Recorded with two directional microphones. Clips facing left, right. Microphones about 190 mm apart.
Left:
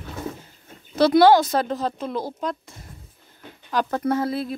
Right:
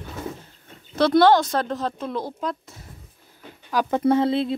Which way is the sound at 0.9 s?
5° left (ahead or behind).